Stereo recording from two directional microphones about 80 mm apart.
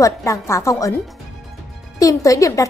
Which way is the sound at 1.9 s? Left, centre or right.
Left.